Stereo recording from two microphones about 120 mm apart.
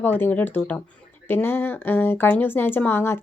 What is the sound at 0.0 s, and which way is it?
A woman's voice, 15° left (ahead or behind).